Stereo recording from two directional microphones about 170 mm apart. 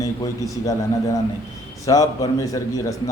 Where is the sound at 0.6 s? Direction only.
20° left (ahead or behind).